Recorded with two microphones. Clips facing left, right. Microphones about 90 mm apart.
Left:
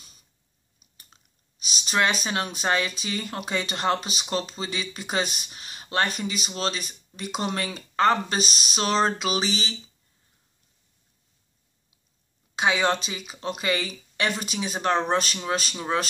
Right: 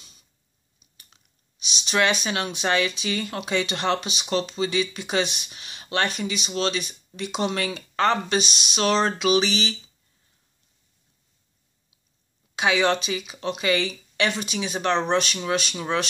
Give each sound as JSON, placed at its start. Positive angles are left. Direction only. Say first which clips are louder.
{"t": 0.7, "sound": "speech", "louder": "left 1 dB", "side_deg": 40}
{"t": 12.5, "sound": "speech", "louder": "right 2 dB", "side_deg": 35}